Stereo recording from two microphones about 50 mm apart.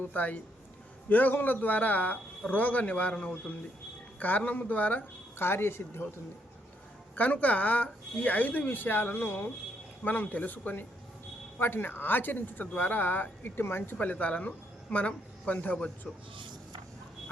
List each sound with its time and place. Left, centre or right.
0.1 s speech: left
4.2 s speech: left
5.4 s speech: left
7.2 s speech: left
10.0 s speech: left
14.0 s speech: left